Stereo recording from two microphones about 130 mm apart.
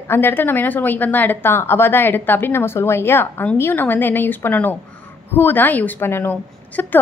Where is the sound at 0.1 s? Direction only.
15° left (ahead or behind).